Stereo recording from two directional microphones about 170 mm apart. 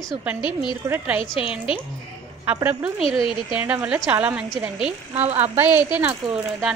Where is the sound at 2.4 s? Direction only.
15° right (ahead or behind).